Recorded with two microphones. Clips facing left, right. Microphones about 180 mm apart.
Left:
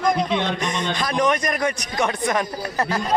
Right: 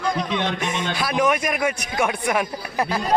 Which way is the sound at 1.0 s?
5° right (ahead or behind).